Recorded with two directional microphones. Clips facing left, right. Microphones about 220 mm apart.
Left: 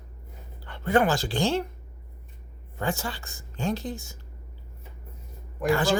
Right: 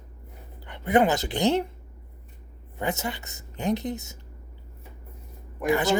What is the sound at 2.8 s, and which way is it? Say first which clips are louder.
A woman's voice: right 1 dB; 20° right (ahead or behind).